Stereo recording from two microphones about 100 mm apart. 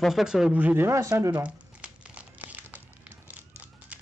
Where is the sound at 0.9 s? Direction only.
30° right (ahead or behind).